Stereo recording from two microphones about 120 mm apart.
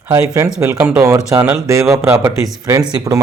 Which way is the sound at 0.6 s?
20° right (ahead or behind).